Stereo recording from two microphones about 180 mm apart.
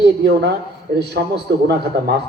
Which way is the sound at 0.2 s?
65° right (ahead or behind).